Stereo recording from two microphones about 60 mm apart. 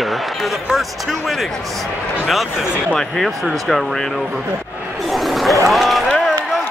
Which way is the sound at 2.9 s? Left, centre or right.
Centre.